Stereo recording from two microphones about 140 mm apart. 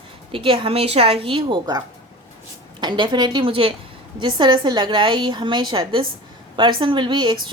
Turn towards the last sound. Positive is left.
turn(degrees=-35)  # may be behind; listen again after turning